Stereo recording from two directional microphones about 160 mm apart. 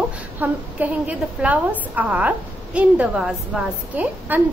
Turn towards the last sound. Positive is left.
turn(degrees=-10)  # may be behind; listen again after turning